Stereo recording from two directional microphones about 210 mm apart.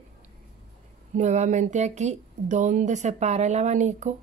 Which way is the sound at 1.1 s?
35° right (ahead or behind).